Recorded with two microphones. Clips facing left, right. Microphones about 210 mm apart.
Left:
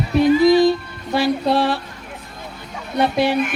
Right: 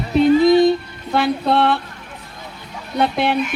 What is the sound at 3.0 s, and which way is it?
Speech, 55° right (ahead or behind).